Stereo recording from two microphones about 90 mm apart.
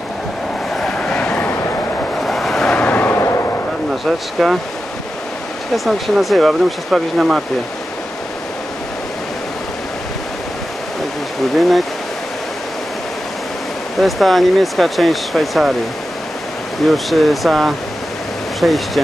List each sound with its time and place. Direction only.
0.7 s train: 10° left (ahead or behind)
2.1 s a sound: 5° left (ahead or behind); by 3.5 s 30° left (ahead or behind)
3.9 s speech: centre (ahead or behind)
5.9 s speech: centre (ahead or behind)
13.9 s speech: centre (ahead or behind)
16.8 s speech: centre (ahead or behind)